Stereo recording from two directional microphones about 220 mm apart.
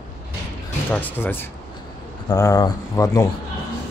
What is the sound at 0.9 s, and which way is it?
Speech, 10° left (ahead or behind).